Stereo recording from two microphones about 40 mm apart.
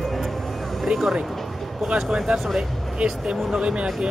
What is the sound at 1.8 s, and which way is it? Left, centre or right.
Speech, right.